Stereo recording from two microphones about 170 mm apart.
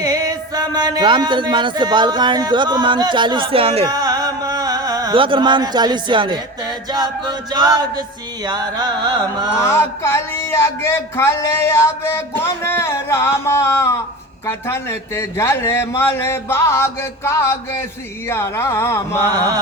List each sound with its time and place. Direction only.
0.0 s speech: 20° right (ahead or behind)
3.8 s a sound: 20° right (ahead or behind)
8.4 s speech: 25° right (ahead or behind)
9.6 s speech: 15° left (ahead or behind)
19.2 s speech: 20° right (ahead or behind)